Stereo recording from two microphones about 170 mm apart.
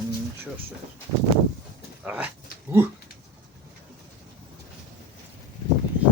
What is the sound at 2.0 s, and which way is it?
Speech, 10° right (ahead or behind).